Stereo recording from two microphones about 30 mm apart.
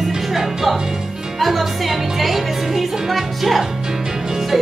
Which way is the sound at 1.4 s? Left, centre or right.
Centre.